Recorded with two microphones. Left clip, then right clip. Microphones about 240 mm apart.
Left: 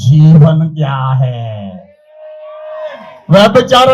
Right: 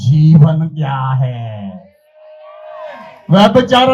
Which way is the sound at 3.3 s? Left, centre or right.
Left.